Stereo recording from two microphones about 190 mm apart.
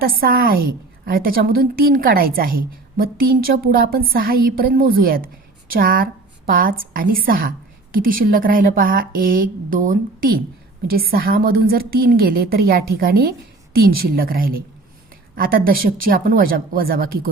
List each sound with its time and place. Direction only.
0.0 s a woman's voice: 50° right (ahead or behind)